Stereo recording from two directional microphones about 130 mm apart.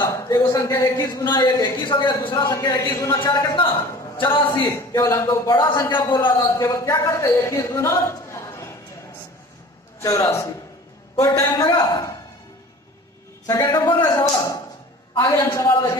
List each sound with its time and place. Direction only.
0.1 s speech: 25° left (ahead or behind)
4.2 s speech: 40° left (ahead or behind)
4.7 s speech: 25° left (ahead or behind)
5.5 s speech: 40° left (ahead or behind); by 8.6 s 20° left (ahead or behind)
9.9 s a man's voice: 25° left (ahead or behind)
13.5 s speech: 30° left (ahead or behind)